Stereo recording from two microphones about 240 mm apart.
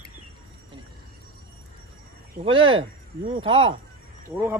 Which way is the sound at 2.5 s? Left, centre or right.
Right.